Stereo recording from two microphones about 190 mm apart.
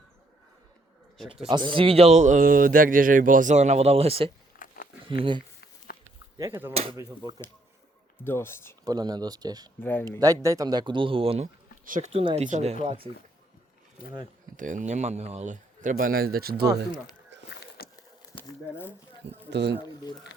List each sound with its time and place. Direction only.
1.3 s a man's voice: 25° right (ahead or behind)
4.5 s a sound: 50° left (ahead or behind)
6.3 s speech: 15° right (ahead or behind)
8.2 s speech: 10° left (ahead or behind)
8.8 s speech: 20° right (ahead or behind)
9.8 s speech: 10° left (ahead or behind)
10.1 s speech: 20° right (ahead or behind)
11.9 s a man's voice: 40° right (ahead or behind)
12.2 s a man's voice: 25° right (ahead or behind)
14.5 s speech: 45° right (ahead or behind)
17.3 s a sound: 70° right (ahead or behind)
17.8 s a sound: 55° left (ahead or behind)
19.2 s speech: 65° right (ahead or behind)